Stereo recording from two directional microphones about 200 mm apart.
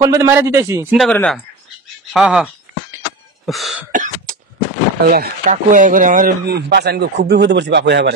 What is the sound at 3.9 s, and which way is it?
Cough, 40° right (ahead or behind).